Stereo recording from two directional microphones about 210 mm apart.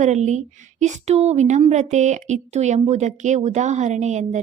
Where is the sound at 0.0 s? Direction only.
35° right (ahead or behind).